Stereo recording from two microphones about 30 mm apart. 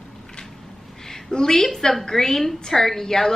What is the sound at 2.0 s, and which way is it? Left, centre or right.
Speech, centre.